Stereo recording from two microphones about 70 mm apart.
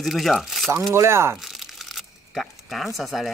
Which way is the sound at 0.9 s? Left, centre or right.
Right.